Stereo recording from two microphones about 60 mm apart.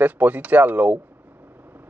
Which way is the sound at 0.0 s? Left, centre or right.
Right.